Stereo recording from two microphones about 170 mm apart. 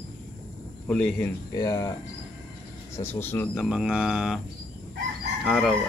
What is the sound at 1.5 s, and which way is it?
Speech, 20° left (ahead or behind).